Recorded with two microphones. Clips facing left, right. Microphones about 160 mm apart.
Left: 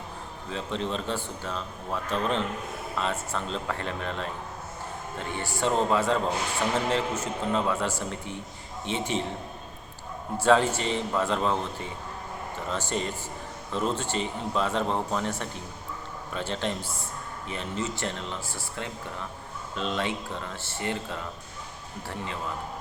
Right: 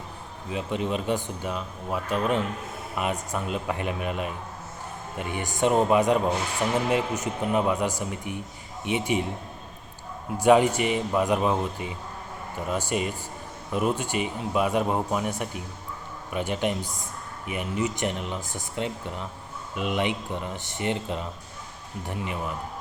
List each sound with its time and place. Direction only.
0.5 s a man's voice: 15° right (ahead or behind)
10.3 s a man's voice: 15° right (ahead or behind)